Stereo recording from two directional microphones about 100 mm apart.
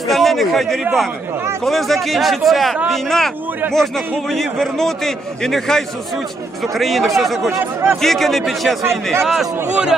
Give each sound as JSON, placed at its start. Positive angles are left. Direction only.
{"t": 0.1, "sound": "a man's voice", "side_deg": 0}
{"t": 7.6, "sound": "speech", "side_deg": -25}
{"t": 8.0, "sound": "a man's voice", "side_deg": 0}